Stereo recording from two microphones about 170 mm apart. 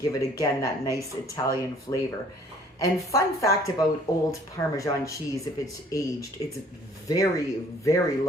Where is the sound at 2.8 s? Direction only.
20° left (ahead or behind).